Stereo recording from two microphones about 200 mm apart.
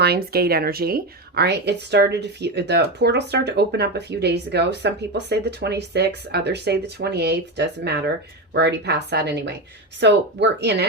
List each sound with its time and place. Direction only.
0.0 s speech: 50° right (ahead or behind)